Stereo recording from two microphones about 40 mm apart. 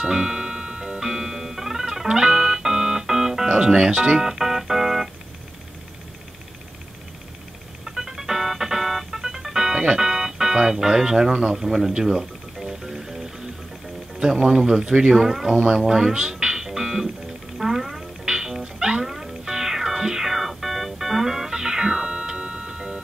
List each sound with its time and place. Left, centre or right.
0.0 s music: centre
7.8 s music: centre
14.4 s speech: centre
15.1 s speech: centre
15.5 s speech: right
15.8 s music: centre
18.2 s music: centre
19.0 s music: centre; by 23.0 s right